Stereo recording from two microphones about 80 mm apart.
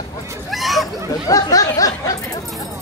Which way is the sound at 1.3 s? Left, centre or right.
Left.